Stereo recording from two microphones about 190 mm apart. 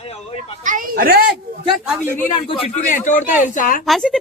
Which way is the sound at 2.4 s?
30° left (ahead or behind).